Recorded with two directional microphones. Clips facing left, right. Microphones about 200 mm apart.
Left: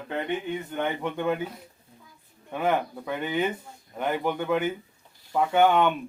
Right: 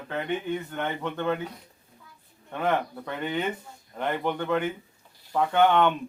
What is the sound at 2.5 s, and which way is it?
Speech, 10° left (ahead or behind).